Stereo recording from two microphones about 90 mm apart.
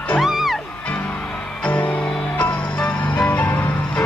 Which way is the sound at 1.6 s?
15° left (ahead or behind).